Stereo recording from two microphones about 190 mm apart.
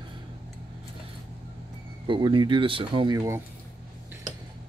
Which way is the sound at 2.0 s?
25° right (ahead or behind).